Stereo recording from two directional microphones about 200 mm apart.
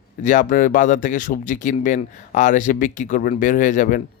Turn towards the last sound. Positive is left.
turn(degrees=40)  # may be behind; listen again after turning